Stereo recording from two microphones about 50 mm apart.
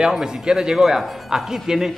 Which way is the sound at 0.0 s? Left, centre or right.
Centre.